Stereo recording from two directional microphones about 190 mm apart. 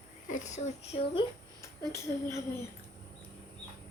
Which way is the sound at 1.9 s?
15° left (ahead or behind).